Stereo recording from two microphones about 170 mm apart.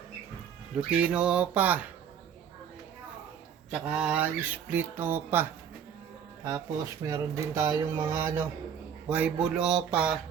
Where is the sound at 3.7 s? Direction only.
5° right (ahead or behind).